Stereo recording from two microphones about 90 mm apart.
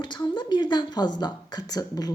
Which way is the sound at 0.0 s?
55° left (ahead or behind).